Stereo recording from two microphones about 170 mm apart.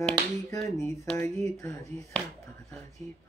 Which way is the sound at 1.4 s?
20° left (ahead or behind).